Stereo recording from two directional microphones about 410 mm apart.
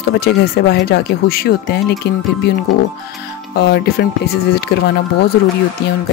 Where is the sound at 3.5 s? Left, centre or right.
Left.